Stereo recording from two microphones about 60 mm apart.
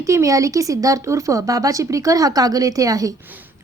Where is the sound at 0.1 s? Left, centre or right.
Right.